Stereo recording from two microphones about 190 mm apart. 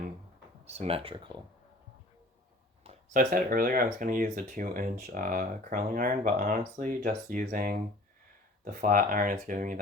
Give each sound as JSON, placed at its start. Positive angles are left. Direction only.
{"t": 0.6, "sound": "speech", "side_deg": -35}
{"t": 2.8, "sound": "a sound", "side_deg": -35}
{"t": 3.2, "sound": "speech", "side_deg": -45}